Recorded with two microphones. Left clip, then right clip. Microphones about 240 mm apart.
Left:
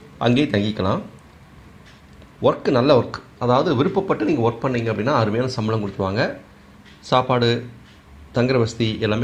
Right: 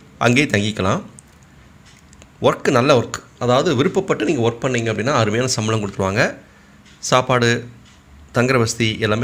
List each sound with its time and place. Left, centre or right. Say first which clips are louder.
0.2 s speech: right 3 dB; right
2.4 s speech: right 2 dB; right